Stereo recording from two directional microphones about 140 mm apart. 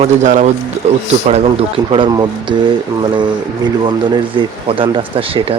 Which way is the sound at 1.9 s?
35° right (ahead or behind).